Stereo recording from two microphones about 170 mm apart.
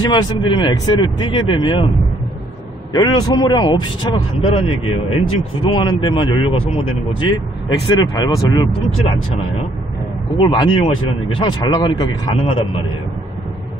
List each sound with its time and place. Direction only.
0.0 s speech: 25° left (ahead or behind)
2.9 s speech: 25° left (ahead or behind)
10.3 s speech: 25° left (ahead or behind)